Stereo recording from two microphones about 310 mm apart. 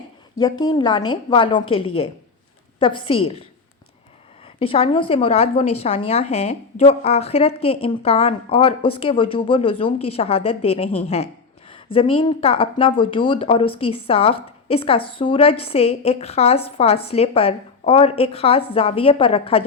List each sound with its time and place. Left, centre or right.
0.3 s a woman's voice: centre
3.1 s a woman's voice: centre
4.6 s a woman's voice: centre